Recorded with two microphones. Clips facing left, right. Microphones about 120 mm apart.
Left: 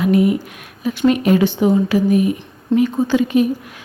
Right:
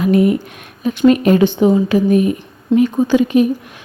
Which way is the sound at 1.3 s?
20° right (ahead or behind).